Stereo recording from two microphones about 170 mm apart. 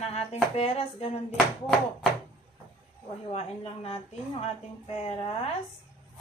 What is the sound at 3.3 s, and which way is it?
Speech, 40° left (ahead or behind).